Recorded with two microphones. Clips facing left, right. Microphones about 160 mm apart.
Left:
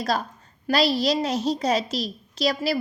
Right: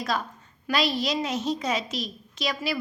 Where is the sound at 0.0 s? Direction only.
35° left (ahead or behind).